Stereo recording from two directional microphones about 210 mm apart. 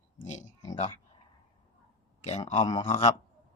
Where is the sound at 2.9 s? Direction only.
35° left (ahead or behind).